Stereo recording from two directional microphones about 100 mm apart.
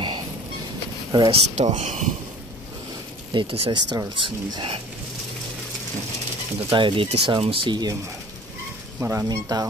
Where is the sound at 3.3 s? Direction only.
70° right (ahead or behind).